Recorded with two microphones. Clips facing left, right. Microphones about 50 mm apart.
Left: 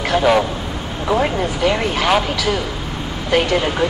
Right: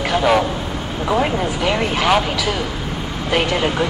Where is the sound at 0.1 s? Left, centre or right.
Centre.